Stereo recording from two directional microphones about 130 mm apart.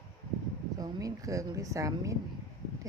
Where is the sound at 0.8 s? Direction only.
30° right (ahead or behind).